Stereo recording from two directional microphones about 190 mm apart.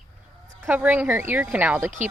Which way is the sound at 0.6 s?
10° right (ahead or behind).